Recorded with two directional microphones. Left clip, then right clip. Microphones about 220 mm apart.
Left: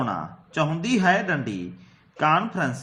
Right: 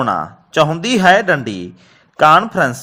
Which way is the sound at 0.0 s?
40° right (ahead or behind).